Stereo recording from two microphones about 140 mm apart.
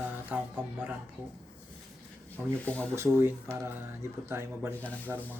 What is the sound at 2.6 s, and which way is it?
Speech, 10° left (ahead or behind).